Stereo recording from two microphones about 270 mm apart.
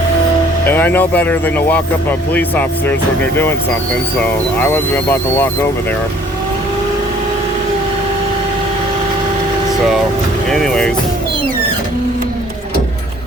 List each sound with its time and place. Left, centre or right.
0.7 s speech: centre
4.6 s speech: centre
10.5 s speech: centre